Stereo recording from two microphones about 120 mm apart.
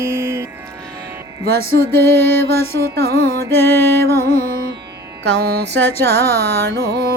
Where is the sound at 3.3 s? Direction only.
20° left (ahead or behind).